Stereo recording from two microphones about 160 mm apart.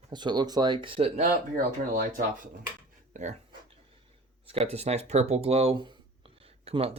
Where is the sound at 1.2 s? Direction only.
60° right (ahead or behind).